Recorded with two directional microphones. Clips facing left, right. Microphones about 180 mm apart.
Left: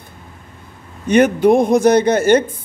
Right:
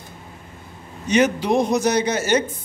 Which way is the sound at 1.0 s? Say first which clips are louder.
Left 7 dB; 55° left (ahead or behind).